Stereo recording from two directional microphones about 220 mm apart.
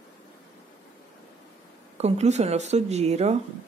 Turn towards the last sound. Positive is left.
turn(degrees=-30)  # may be behind; listen again after turning